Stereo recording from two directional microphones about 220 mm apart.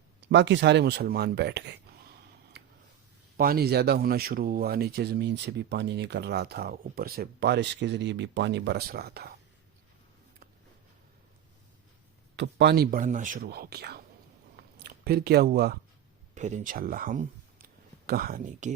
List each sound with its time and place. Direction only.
0.2 s speech: 55° right (ahead or behind)
2.5 s a sound: 45° right (ahead or behind)
3.3 s speech: 40° right (ahead or behind)
12.4 s speech: 50° right (ahead or behind)
14.5 s a sound: 45° right (ahead or behind)
16.3 s speech: 35° right (ahead or behind)